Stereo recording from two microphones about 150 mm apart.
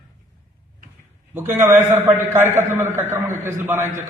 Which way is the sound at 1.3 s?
15° right (ahead or behind).